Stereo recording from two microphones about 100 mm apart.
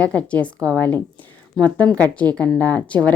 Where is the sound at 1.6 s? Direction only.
45° right (ahead or behind).